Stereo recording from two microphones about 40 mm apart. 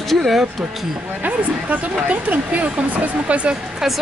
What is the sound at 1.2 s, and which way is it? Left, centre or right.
Speech, right.